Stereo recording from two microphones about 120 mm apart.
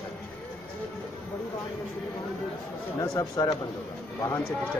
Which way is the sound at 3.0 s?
30° left (ahead or behind).